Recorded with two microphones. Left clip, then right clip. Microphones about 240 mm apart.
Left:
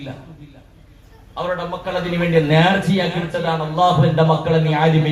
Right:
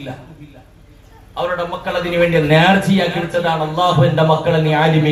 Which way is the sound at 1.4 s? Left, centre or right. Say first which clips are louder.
Right 3 dB; right.